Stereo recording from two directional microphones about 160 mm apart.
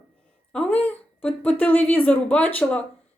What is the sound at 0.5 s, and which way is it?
A woman's voice, 5° left (ahead or behind).